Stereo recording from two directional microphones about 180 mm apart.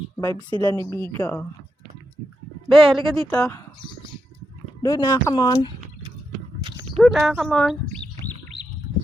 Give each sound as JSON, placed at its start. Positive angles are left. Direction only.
{"t": 0.2, "sound": "speech", "side_deg": 10}
{"t": 2.6, "sound": "a woman's voice", "side_deg": 0}
{"t": 4.8, "sound": "speech", "side_deg": 20}
{"t": 6.9, "sound": "speech", "side_deg": 0}